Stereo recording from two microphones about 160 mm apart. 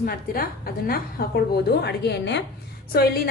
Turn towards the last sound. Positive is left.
turn(degrees=75)  # may be behind; listen again after turning